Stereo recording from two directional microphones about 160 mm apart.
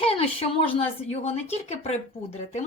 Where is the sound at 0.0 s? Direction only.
35° left (ahead or behind).